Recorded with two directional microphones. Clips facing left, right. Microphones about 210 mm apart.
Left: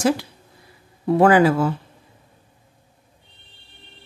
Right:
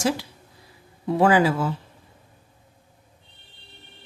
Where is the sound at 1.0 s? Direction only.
55° left (ahead or behind).